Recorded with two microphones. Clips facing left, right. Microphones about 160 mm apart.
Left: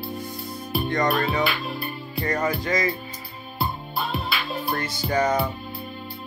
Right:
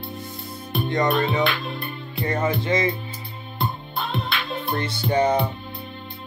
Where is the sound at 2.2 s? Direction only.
25° right (ahead or behind).